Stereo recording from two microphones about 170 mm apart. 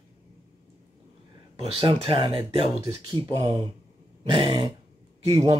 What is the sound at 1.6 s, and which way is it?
Speech, 35° right (ahead or behind).